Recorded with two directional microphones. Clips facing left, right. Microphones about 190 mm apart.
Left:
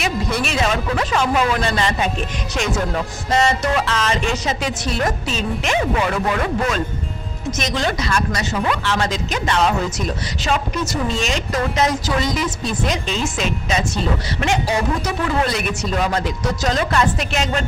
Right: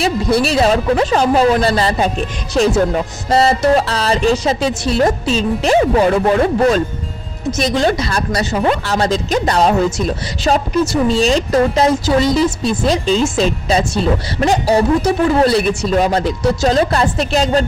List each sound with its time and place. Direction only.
0.0 s speech: 35° right (ahead or behind)